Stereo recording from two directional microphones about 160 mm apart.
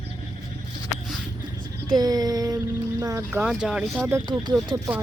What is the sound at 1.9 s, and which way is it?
Speech, 25° right (ahead or behind).